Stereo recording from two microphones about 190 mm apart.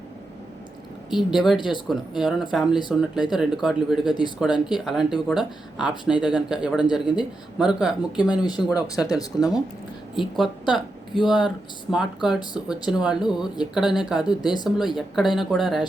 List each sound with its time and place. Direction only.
1.1 s speech: centre (ahead or behind)
1.5 s speech: 25° left (ahead or behind)
1.9 s speech: 5° right (ahead or behind)
8.6 s speech: 20° left (ahead or behind)
10.2 s speech: centre (ahead or behind)
11.1 s speech: 25° left (ahead or behind)
11.3 s speech: 5° right (ahead or behind)